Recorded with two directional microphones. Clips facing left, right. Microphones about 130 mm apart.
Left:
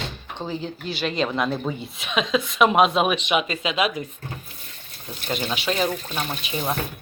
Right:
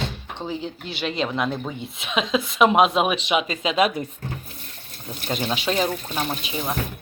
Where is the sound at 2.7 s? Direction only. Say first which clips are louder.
Even; 15° right (ahead or behind).